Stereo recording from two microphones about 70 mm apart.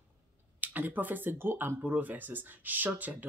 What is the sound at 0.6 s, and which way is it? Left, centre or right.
Speech, right.